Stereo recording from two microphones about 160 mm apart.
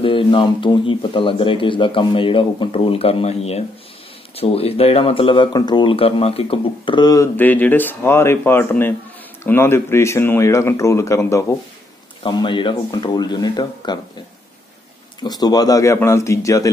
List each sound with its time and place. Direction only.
0.0 s speech: 30° left (ahead or behind)
7.3 s speech: 10° left (ahead or behind)
12.2 s speech: 30° left (ahead or behind)
15.2 s speech: 25° left (ahead or behind)